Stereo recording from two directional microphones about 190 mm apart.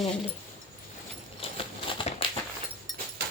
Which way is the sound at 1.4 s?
30° left (ahead or behind).